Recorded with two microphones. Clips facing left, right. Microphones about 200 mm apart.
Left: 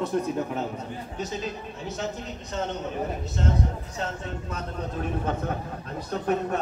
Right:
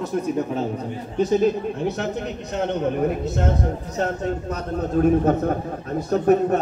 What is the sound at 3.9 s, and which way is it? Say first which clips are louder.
Speech: right 9 dB; 40° right (ahead or behind).